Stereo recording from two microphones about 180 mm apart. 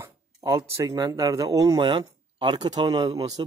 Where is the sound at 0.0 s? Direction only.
15° right (ahead or behind).